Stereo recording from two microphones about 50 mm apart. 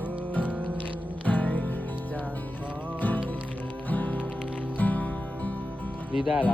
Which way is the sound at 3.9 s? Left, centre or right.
Left.